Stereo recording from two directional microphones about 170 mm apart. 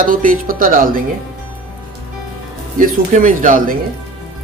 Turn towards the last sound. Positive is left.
turn(degrees=-50)  # may be behind; listen again after turning